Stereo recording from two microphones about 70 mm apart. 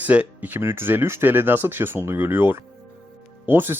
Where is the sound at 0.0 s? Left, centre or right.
Right.